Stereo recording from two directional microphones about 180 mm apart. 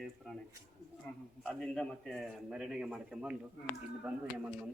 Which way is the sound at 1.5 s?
5° left (ahead or behind).